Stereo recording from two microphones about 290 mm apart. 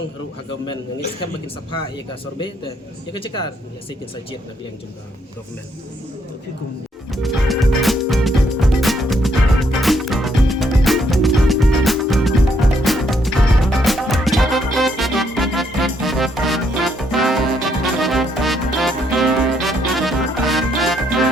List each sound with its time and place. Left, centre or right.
3.1 s speech: centre
7.1 s music: centre